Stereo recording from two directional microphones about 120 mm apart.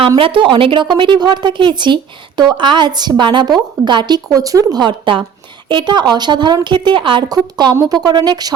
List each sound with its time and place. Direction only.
0.2 s a woman's voice: 45° right (ahead or behind)